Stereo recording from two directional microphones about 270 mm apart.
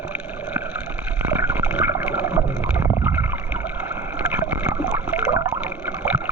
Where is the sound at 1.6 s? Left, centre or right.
Centre.